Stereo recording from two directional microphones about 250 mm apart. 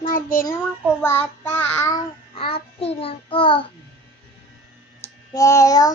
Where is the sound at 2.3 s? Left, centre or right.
Left.